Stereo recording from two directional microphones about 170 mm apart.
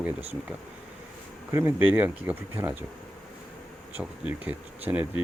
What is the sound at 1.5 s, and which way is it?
Speech, 15° right (ahead or behind).